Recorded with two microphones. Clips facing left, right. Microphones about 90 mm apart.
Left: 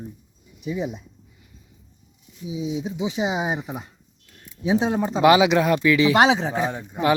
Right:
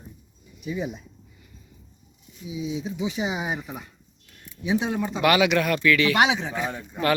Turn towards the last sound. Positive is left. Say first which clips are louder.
# left 3 dB
turn(degrees=20)  # may be behind; listen again after turning